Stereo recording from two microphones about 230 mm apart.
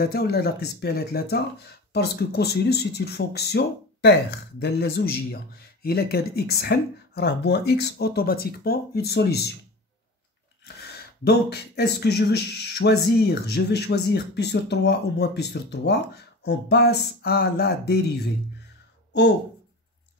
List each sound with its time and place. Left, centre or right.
0.0 s speech: left
10.6 s speech: left